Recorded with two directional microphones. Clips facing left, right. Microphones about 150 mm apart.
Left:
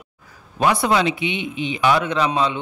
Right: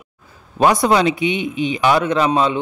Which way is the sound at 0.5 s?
35° right (ahead or behind).